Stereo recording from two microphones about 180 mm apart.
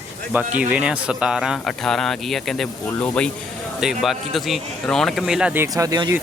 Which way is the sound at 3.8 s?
Centre (ahead or behind).